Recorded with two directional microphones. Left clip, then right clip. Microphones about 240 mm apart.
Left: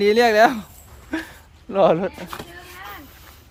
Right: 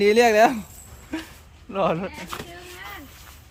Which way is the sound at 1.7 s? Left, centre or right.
Left.